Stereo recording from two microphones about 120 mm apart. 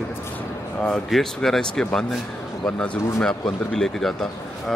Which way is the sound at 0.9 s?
Centre (ahead or behind).